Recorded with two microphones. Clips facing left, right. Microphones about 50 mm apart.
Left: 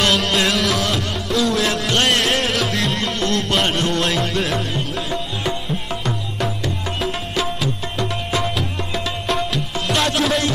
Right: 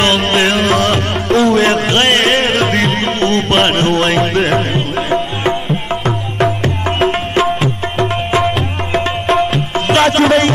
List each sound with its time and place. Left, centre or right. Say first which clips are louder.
0.0 s music: right 5 dB; right